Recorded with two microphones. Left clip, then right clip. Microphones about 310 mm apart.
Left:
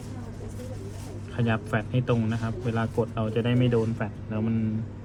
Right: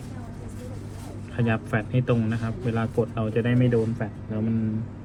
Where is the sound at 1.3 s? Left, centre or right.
Centre.